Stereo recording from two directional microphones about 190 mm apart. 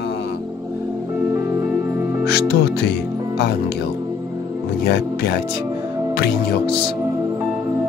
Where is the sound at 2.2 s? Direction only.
55° left (ahead or behind).